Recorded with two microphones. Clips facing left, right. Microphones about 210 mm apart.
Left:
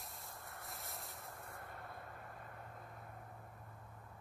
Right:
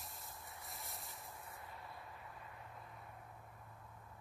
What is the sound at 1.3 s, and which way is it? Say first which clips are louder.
Vehicle: left 2 dB; 55° left (ahead or behind).